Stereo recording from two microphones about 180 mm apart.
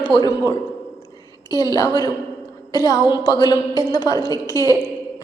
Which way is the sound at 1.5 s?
20° left (ahead or behind).